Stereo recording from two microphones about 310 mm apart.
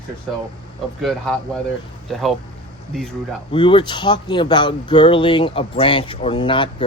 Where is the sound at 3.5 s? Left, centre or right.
Centre.